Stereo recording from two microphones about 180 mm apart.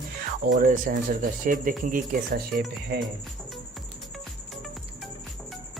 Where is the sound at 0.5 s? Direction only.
50° right (ahead or behind).